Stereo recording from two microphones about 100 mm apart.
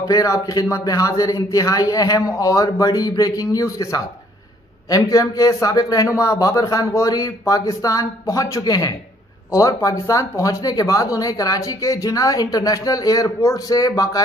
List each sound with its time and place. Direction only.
0.0 s speech: 35° left (ahead or behind)